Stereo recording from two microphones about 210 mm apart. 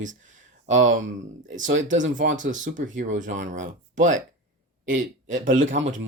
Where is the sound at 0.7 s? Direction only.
35° right (ahead or behind).